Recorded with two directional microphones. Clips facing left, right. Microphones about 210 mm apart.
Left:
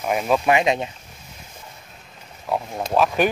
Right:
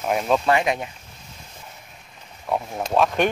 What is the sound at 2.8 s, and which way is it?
Speech, centre (ahead or behind).